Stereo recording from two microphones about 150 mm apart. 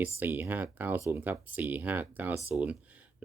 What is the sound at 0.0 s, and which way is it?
Speech, 15° right (ahead or behind).